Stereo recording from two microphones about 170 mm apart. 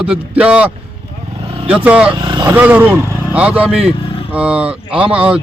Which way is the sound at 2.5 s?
10° right (ahead or behind).